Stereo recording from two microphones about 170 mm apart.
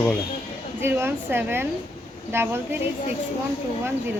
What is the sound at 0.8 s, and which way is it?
A woman's voice, 15° right (ahead or behind).